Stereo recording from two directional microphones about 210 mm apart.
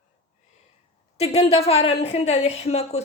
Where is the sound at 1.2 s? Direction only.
30° left (ahead or behind).